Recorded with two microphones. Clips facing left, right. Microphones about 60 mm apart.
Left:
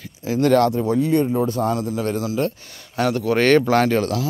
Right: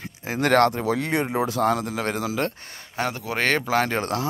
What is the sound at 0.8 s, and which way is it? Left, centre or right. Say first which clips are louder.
Speech: left 5 dB; right.